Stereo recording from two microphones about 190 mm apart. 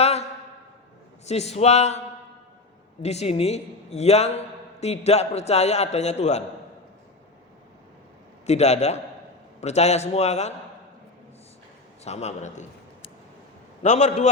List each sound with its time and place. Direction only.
0.0 s a sound: 35° left (ahead or behind)
1.2 s a man's voice: 35° left (ahead or behind)
3.0 s a man's voice: 35° left (ahead or behind)
8.4 s a man's voice: 35° left (ahead or behind)
12.0 s a man's voice: 35° left (ahead or behind)